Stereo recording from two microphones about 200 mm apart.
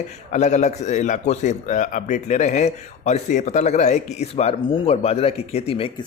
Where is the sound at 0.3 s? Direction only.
35° left (ahead or behind).